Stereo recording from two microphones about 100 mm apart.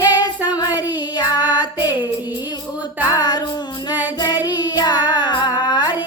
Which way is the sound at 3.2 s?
45° left (ahead or behind).